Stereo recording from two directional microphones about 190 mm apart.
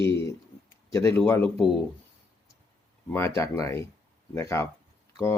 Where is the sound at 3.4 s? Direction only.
15° left (ahead or behind).